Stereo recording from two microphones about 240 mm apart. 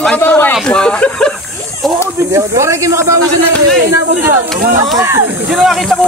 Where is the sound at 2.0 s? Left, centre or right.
Centre.